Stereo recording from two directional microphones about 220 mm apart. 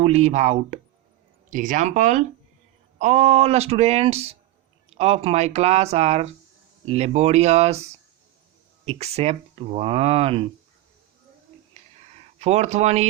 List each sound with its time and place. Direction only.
0.0 s speech: 30° right (ahead or behind)
8.9 s speech: 30° right (ahead or behind)
12.4 s speech: 30° right (ahead or behind)